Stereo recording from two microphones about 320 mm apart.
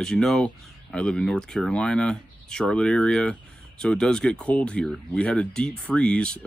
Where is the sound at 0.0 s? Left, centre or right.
Centre.